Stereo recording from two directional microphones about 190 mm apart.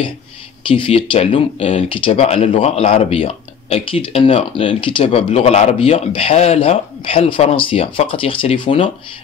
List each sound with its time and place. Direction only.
0.7 s speech: 30° left (ahead or behind)